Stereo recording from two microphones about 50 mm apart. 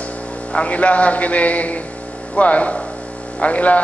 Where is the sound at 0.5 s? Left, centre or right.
Left.